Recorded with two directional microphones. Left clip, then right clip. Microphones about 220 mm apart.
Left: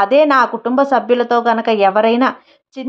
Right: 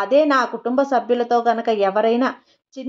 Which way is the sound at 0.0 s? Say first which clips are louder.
Left 5 dB; 20° left (ahead or behind).